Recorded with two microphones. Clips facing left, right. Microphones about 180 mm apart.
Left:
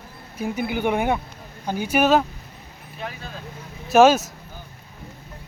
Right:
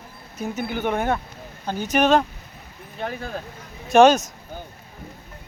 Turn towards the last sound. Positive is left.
turn(degrees=5)  # may be behind; listen again after turning